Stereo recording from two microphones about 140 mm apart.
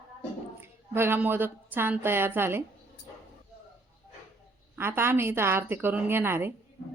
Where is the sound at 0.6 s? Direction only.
15° right (ahead or behind).